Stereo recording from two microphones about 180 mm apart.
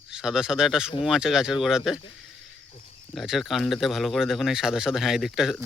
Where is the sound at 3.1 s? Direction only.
Centre (ahead or behind).